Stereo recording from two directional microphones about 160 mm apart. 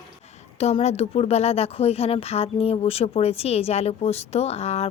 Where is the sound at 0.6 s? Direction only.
45° left (ahead or behind).